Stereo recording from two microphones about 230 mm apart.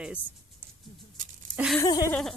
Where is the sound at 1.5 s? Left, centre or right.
Centre.